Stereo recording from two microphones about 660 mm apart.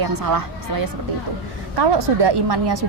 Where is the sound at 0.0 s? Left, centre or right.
Right.